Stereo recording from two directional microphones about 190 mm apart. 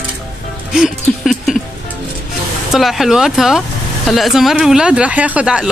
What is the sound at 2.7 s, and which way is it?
Speech, centre (ahead or behind).